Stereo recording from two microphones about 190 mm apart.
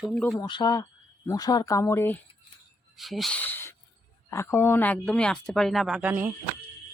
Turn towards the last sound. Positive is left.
turn(degrees=-10)  # may be behind; listen again after turning